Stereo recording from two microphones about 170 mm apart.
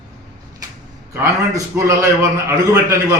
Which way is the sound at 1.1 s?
20° right (ahead or behind).